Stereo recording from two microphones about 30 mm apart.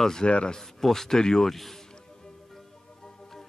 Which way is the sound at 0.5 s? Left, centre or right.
Centre.